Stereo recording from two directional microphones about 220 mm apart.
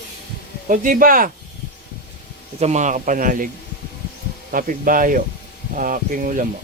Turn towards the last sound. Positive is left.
turn(degrees=-35)  # may be behind; listen again after turning